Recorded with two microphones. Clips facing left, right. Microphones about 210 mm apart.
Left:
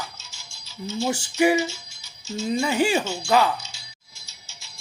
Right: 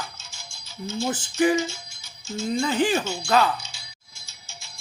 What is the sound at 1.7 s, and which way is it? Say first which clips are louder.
Music: even; 50° right (ahead or behind).